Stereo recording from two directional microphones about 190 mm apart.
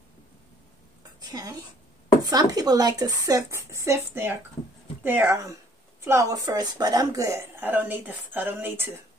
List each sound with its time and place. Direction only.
1.3 s a woman's voice: 20° right (ahead or behind)